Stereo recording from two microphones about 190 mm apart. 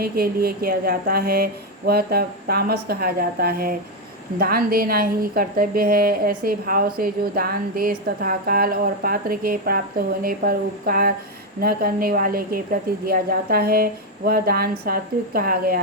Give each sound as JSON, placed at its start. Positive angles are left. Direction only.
{"t": 0.0, "sound": "a woman's voice", "side_deg": -55}